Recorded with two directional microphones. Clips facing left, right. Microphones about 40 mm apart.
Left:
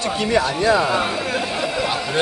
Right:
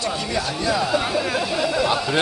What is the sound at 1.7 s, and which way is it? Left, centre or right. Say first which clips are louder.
Speech: right 2 dB; centre.